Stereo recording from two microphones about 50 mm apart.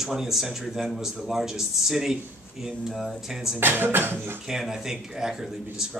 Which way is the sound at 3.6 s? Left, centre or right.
Right.